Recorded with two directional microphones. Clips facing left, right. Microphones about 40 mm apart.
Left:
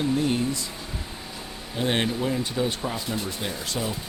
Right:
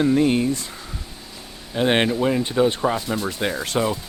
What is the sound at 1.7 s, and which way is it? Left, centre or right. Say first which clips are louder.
Speech: right 6 dB; right.